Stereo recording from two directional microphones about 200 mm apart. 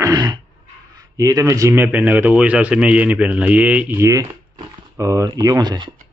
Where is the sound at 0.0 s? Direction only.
20° right (ahead or behind).